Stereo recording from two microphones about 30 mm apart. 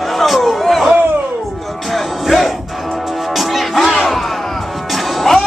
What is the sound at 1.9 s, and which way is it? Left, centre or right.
Music, centre.